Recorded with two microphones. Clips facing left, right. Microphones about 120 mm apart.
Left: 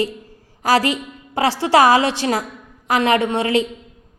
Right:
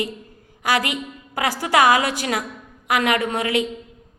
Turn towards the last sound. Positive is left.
turn(degrees=30)  # may be behind; listen again after turning